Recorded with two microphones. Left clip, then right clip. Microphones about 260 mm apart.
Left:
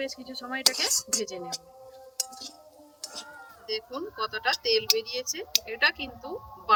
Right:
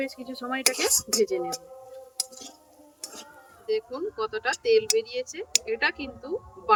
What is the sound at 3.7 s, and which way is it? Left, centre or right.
Speech, centre.